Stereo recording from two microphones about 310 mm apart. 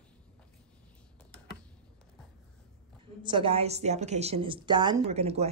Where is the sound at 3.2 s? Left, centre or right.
Centre.